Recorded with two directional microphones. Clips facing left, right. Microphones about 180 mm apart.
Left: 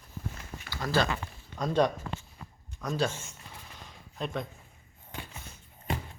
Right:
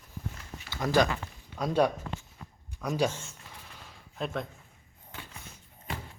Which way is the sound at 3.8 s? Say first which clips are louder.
Right 1 dB; centre (ahead or behind).